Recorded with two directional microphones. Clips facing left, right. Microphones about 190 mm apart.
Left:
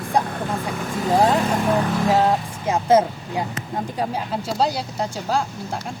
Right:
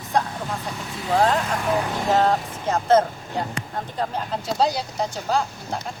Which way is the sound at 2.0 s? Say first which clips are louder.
Right 1 dB; 10° left (ahead or behind).